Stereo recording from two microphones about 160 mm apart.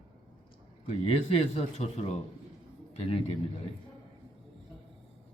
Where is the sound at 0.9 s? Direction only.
40° left (ahead or behind).